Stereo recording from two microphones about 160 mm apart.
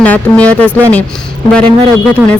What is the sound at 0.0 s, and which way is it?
Speech, 10° left (ahead or behind).